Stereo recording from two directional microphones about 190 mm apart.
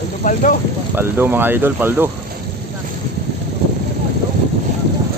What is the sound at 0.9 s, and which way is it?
Speech, 10° right (ahead or behind).